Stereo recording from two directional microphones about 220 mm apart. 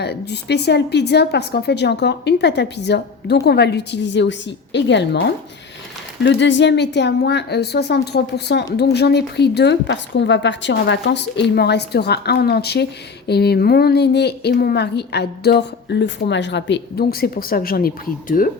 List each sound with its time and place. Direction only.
0.0 s speech: 50° left (ahead or behind)